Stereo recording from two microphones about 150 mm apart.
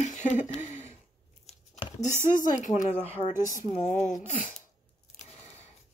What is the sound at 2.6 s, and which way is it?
Speech, 55° left (ahead or behind).